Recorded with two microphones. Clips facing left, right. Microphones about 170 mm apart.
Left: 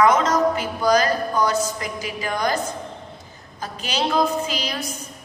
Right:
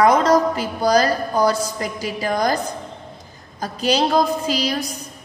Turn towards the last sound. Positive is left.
turn(degrees=-35)  # may be behind; listen again after turning